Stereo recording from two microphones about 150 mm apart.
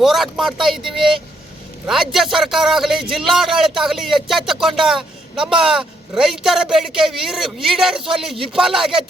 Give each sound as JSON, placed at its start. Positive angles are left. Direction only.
{"t": 0.0, "sound": "a man's voice", "side_deg": 0}